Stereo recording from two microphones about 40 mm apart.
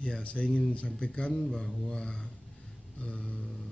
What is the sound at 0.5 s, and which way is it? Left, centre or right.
Speech, centre.